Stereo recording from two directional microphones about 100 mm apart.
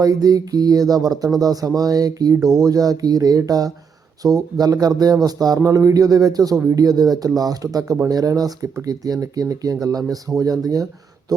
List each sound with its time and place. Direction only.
0.0 s speech: 40° right (ahead or behind)